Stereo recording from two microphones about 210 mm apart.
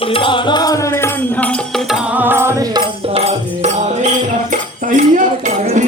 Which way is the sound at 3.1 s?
30° right (ahead or behind).